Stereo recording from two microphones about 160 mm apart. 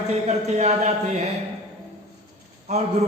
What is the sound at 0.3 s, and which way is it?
Speech, 45° right (ahead or behind).